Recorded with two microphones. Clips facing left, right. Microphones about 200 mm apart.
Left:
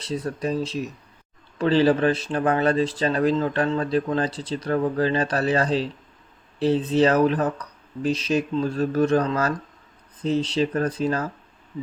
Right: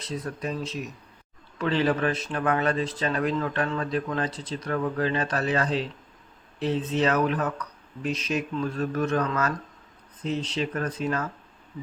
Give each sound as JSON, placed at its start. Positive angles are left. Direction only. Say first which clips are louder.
{"t": 0.0, "sound": "speech", "louder": "left 5 dB", "side_deg": 30}